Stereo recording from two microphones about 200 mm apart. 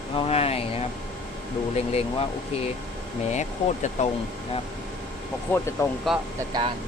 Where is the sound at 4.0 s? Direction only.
35° left (ahead or behind).